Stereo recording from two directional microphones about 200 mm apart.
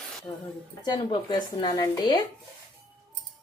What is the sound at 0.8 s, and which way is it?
Speech, 20° left (ahead or behind).